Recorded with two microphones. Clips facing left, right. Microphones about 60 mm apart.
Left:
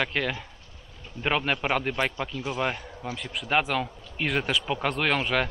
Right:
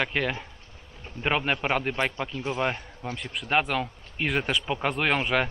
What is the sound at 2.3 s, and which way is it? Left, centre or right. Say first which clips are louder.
Speech: right 1 dB; right.